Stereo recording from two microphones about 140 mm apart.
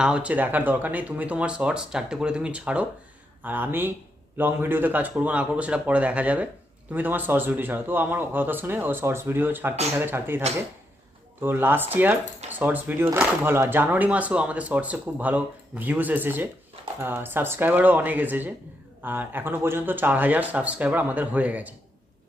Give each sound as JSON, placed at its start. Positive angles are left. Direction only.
{"t": 0.0, "sound": "speech", "side_deg": -10}